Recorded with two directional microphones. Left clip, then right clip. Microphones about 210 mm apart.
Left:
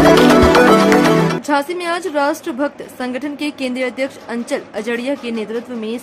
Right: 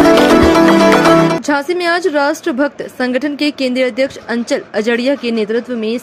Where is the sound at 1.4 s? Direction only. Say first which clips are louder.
Right 3 dB; 20° right (ahead or behind).